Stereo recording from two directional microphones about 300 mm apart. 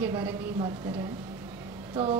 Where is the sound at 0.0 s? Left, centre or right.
Centre.